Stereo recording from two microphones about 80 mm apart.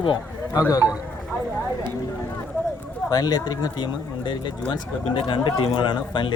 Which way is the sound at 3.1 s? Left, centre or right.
Left.